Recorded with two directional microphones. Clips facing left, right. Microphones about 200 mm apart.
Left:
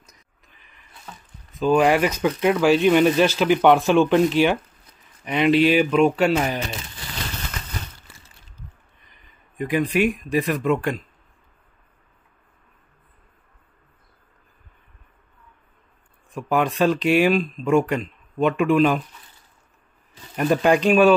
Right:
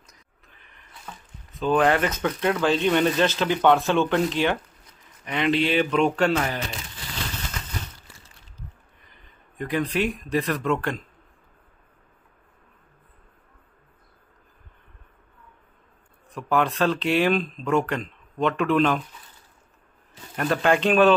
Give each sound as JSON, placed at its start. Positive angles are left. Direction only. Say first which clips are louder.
{"t": 1.8, "sound": "speech", "louder": "left 2 dB", "side_deg": 10}
{"t": 9.1, "sound": "speech", "louder": "right 1 dB", "side_deg": 15}
{"t": 16.3, "sound": "speech", "louder": "left 2 dB", "side_deg": 15}
{"t": 20.3, "sound": "speech", "louder": "left 4 dB", "side_deg": 15}